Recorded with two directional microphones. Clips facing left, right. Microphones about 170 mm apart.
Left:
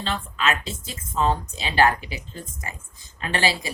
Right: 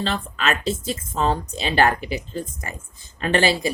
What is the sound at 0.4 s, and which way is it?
Speech, 40° right (ahead or behind).